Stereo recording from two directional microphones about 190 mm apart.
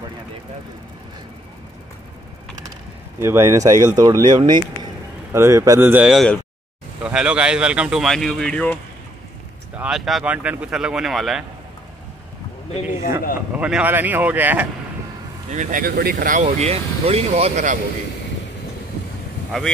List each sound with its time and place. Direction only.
3.2 s speech: 15° right (ahead or behind); by 8.7 s 5° left (ahead or behind)
9.8 s speech: 5° right (ahead or behind)
13.6 s speech: 5° right (ahead or behind)
15.5 s speech: 45° right (ahead or behind)
16.4 s speech: 35° right (ahead or behind)
19.5 s speech: 5° left (ahead or behind)